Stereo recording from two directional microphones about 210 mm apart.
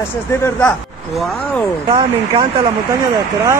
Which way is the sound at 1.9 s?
25° right (ahead or behind).